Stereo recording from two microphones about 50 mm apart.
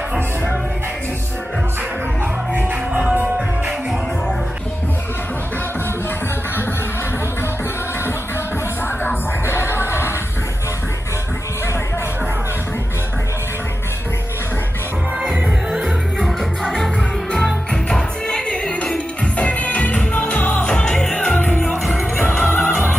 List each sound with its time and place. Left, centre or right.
9.0 s music: left
15.2 s music: centre
17.8 s music: centre
19.3 s music: left
20.6 s music: centre
21.4 s music: left
21.6 s music: centre
22.4 s music: left